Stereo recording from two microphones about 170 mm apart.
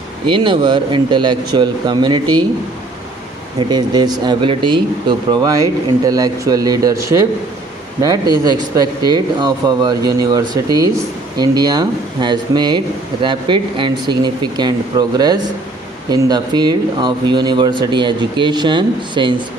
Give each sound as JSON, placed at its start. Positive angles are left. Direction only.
{"t": 0.3, "sound": "speech", "side_deg": -30}
{"t": 3.7, "sound": "speech", "side_deg": -25}
{"t": 8.0, "sound": "speech", "side_deg": -25}